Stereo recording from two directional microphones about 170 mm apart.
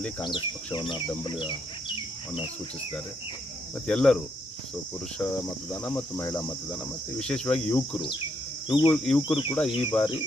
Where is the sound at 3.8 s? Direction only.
5° left (ahead or behind).